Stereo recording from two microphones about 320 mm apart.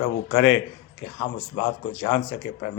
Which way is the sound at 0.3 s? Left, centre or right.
Left.